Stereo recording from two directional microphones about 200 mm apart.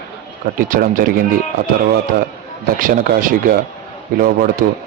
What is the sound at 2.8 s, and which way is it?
A man's voice, 45° right (ahead or behind).